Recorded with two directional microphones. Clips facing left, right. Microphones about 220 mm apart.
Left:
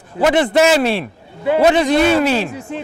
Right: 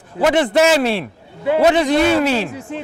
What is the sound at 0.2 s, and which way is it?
A man's voice, 15° left (ahead or behind).